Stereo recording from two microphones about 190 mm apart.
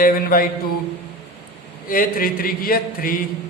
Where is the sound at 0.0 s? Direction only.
50° left (ahead or behind).